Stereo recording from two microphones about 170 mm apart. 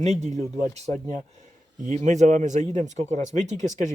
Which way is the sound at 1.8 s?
45° right (ahead or behind).